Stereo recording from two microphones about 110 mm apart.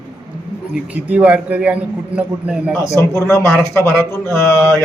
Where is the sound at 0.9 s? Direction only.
15° right (ahead or behind).